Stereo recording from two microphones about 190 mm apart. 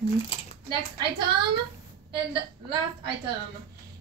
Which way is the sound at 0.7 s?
25° right (ahead or behind).